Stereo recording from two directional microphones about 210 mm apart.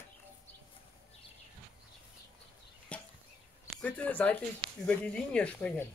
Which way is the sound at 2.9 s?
5° left (ahead or behind).